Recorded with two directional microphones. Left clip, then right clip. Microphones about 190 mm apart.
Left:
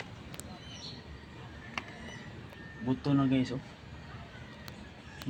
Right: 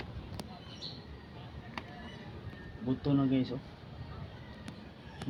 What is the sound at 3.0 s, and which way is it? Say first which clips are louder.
Speech: left 1 dB; 25° left (ahead or behind).